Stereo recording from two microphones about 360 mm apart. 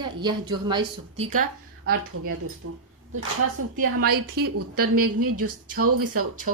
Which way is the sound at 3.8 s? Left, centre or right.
Right.